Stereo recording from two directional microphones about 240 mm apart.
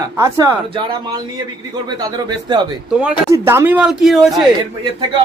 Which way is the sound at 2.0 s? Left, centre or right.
Centre.